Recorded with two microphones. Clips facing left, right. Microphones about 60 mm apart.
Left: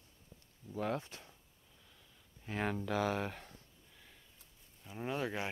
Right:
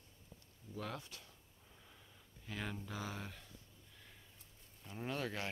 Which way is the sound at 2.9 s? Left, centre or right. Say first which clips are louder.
Left 11 dB; left.